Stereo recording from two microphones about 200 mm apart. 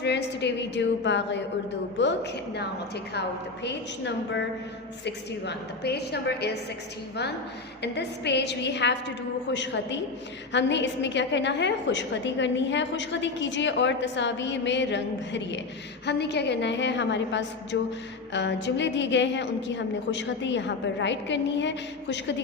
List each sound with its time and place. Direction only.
0.0 s a woman's voice: 60° left (ahead or behind)
7.8 s a woman's voice: 60° left (ahead or behind)